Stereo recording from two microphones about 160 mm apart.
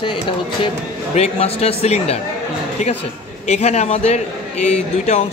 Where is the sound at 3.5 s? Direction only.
45° left (ahead or behind).